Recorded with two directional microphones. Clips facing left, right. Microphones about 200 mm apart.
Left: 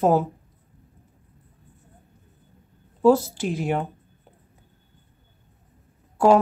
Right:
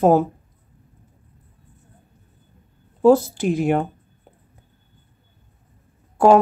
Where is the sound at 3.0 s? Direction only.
55° right (ahead or behind).